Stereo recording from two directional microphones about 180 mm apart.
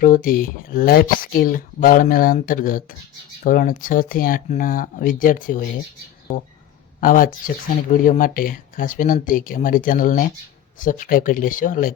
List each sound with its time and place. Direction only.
0.0 s speech: 50° left (ahead or behind)
7.0 s speech: 50° left (ahead or behind)